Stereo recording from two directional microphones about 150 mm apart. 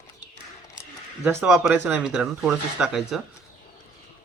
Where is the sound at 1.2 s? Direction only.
10° right (ahead or behind).